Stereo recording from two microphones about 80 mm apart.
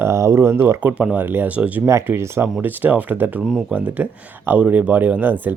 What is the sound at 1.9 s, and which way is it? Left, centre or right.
Speech, right.